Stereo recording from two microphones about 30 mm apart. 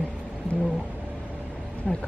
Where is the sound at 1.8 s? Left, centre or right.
Left.